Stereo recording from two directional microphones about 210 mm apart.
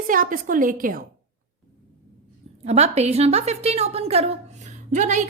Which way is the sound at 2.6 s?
30° right (ahead or behind).